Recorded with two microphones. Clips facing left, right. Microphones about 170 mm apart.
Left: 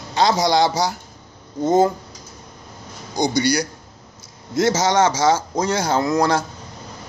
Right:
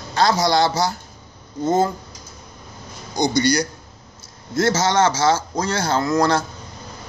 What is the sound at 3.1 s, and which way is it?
Speech, 10° left (ahead or behind).